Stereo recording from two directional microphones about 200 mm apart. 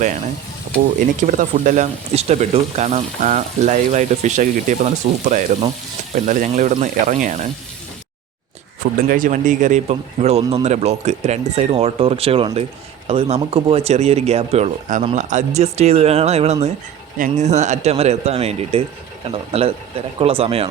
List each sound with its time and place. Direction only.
1.3 s speech: 40° right (ahead or behind)
9.0 s speech: 40° right (ahead or behind)